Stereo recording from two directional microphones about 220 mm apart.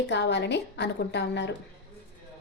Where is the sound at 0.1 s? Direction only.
50° left (ahead or behind).